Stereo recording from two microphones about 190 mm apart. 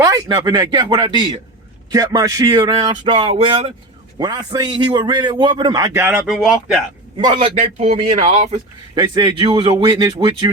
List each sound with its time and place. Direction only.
0.0 s a man's voice: 20° right (ahead or behind); by 6.7 s centre (ahead or behind)
7.3 s a man's voice: 30° right (ahead or behind)